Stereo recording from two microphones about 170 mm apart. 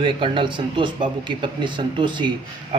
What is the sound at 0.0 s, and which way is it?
Speech, 30° right (ahead or behind).